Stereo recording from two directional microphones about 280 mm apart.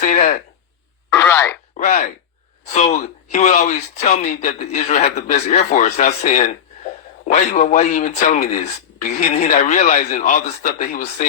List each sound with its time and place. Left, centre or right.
0.0 s a sound: left
1.1 s speech: centre
1.7 s speech: left